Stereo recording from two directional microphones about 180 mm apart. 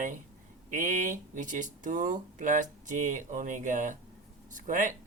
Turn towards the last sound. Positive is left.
turn(degrees=-45)  # may be behind; listen again after turning